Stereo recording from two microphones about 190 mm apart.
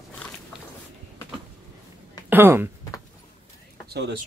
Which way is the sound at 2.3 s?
10° right (ahead or behind).